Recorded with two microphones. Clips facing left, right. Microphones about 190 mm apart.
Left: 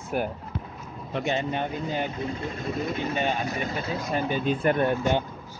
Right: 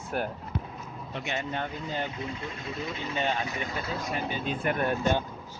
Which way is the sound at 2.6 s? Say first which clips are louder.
Left 7 dB; 50° left (ahead or behind).